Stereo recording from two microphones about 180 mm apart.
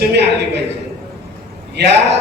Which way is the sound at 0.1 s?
70° right (ahead or behind).